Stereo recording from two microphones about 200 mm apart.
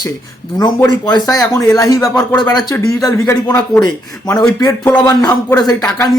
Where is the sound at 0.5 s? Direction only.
20° left (ahead or behind).